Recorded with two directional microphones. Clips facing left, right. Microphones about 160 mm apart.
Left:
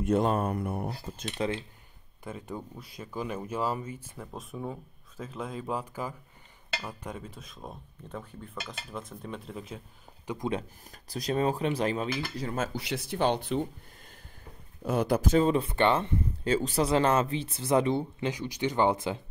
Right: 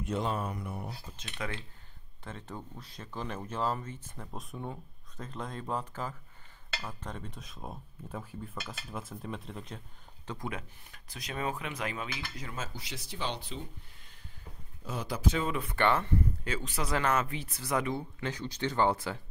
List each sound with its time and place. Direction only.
0.0 s speech: 50° left (ahead or behind)
1.2 s speech: 30° left (ahead or behind)
2.2 s speech: 10° left (ahead or behind)
10.2 s speech: 15° left (ahead or behind)
10.5 s speech: 35° left (ahead or behind)
12.5 s speech: 60° left (ahead or behind)
14.8 s speech: 55° left (ahead or behind); by 16.1 s 20° left (ahead or behind)
16.4 s speech: 35° left (ahead or behind)
18.3 s speech: 15° left (ahead or behind)